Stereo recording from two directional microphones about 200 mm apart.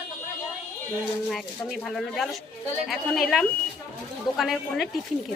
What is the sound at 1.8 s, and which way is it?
Speech, centre (ahead or behind).